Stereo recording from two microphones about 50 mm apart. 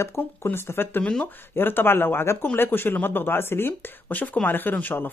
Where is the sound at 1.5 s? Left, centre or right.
Left.